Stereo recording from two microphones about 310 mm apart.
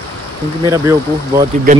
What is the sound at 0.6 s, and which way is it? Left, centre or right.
Speech, centre.